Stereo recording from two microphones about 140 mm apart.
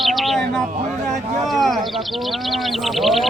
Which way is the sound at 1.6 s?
Centre (ahead or behind).